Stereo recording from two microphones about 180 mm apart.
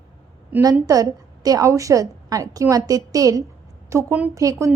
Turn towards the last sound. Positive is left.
turn(degrees=-15)  # may be behind; listen again after turning